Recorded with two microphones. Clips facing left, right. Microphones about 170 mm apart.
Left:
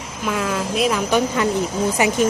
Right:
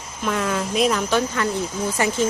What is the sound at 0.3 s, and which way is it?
Speech, centre (ahead or behind).